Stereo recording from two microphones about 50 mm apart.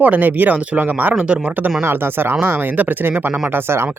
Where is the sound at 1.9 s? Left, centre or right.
Right.